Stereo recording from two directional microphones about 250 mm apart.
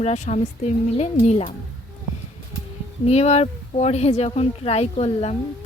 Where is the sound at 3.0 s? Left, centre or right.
Left.